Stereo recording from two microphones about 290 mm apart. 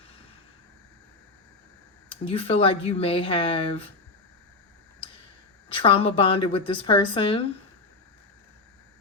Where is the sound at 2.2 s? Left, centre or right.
Centre.